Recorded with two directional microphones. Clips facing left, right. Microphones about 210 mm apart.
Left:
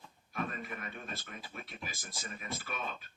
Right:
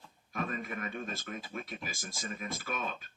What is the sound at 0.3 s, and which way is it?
A man's voice, 45° right (ahead or behind).